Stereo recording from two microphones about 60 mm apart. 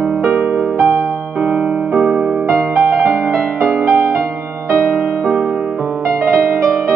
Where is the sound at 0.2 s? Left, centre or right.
Right.